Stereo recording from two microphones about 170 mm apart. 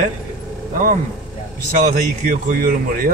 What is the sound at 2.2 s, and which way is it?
Speech, 55° right (ahead or behind).